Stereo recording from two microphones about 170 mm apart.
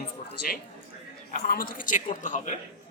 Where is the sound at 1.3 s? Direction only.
60° left (ahead or behind).